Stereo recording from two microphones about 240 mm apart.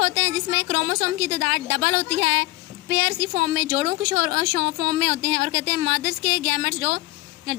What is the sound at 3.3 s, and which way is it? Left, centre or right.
A woman's voice, right.